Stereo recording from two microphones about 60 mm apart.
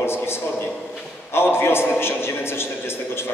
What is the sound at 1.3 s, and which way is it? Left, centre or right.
A man's voice, left.